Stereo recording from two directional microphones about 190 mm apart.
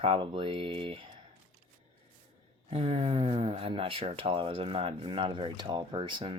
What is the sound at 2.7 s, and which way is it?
Speech, 30° right (ahead or behind).